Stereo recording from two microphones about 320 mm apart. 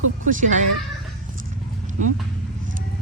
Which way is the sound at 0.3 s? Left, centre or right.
Right.